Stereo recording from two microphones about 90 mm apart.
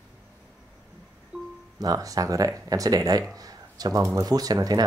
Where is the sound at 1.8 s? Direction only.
40° right (ahead or behind).